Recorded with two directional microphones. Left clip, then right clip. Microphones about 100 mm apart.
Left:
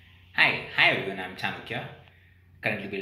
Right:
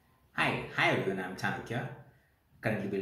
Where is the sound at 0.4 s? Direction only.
35° right (ahead or behind).